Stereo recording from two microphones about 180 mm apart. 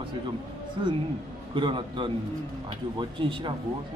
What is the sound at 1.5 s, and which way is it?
A man's voice, 25° right (ahead or behind).